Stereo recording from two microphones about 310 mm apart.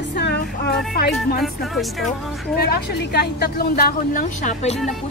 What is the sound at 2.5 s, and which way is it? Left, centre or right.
A woman's voice, left.